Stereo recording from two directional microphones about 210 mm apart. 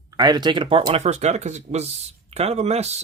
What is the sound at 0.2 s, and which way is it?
Speech, 20° right (ahead or behind).